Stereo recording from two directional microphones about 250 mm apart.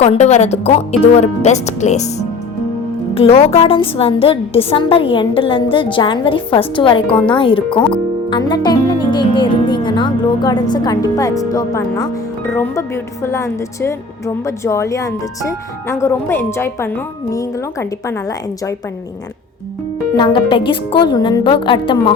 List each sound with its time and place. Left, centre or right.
0.0 s a woman's voice: left
20.1 s a woman's voice: centre